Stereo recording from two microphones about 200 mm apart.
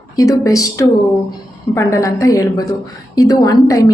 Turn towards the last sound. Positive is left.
turn(degrees=15)  # may be behind; listen again after turning